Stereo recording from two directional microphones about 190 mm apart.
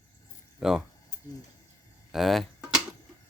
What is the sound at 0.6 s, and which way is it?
Speech, centre (ahead or behind).